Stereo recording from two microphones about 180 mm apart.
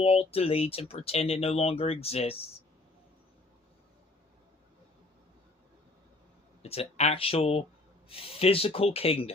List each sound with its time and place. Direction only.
0.0 s speech: 35° left (ahead or behind)
6.6 s speech: 35° left (ahead or behind)